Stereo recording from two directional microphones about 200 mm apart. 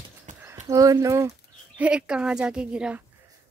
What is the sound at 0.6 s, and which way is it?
Speech, 15° right (ahead or behind).